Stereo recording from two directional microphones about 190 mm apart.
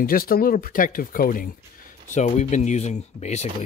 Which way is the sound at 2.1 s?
35° left (ahead or behind).